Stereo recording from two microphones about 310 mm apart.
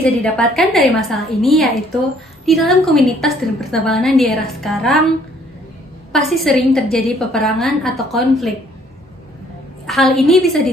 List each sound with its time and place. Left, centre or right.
0.0 s a woman's voice: centre
6.1 s a woman's voice: centre
9.8 s a woman's voice: centre